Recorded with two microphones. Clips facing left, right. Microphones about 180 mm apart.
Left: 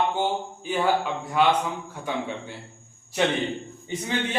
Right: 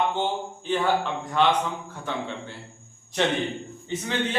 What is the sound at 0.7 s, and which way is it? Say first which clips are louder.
A man's voice: even; 10° left (ahead or behind).